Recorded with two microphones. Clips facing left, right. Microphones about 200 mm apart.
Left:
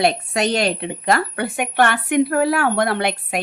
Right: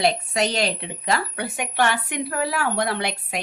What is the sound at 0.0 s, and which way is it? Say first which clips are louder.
A woman's voice: left 3 dB; 55° left (ahead or behind).